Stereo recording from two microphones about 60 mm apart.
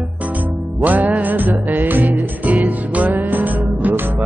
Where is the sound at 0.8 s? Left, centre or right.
Right.